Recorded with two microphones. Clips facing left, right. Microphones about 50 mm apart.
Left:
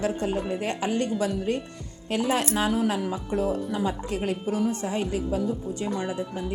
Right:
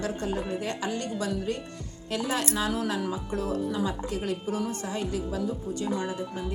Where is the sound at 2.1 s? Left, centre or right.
Left.